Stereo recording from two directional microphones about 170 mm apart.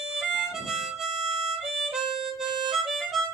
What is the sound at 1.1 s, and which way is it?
Music, 40° right (ahead or behind).